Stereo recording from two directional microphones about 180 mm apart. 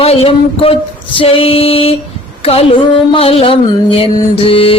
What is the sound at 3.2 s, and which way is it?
Music, 35° left (ahead or behind).